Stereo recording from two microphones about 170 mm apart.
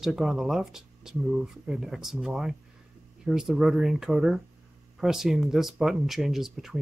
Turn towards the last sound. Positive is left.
turn(degrees=0)  # may be behind; listen again after turning